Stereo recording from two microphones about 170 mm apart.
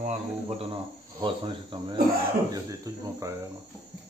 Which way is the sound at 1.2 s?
30° right (ahead or behind).